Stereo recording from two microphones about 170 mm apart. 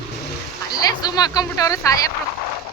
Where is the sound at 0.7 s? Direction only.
25° left (ahead or behind).